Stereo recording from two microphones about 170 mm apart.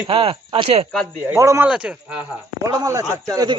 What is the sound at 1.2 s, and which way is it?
Speech, 15° right (ahead or behind).